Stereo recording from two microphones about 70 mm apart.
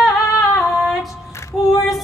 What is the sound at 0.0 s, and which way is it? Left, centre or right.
Female singing, centre.